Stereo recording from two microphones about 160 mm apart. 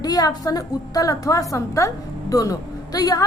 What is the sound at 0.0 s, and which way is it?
A woman's voice, 25° left (ahead or behind).